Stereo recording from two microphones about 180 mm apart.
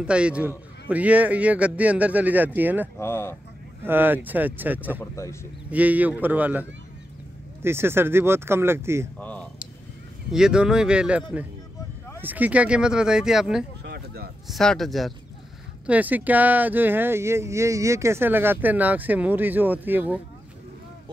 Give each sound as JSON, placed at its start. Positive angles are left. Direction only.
{"t": 0.0, "sound": "speech", "side_deg": -5}
{"t": 3.0, "sound": "speech", "side_deg": 15}
{"t": 3.8, "sound": "speech", "side_deg": -10}
{"t": 5.1, "sound": "speech", "side_deg": 15}
{"t": 5.7, "sound": "speech", "side_deg": -10}
{"t": 9.2, "sound": "speech", "side_deg": 10}
{"t": 10.3, "sound": "speech", "side_deg": -5}
{"t": 13.8, "sound": "a sound", "side_deg": -65}
{"t": 14.5, "sound": "speech", "side_deg": 0}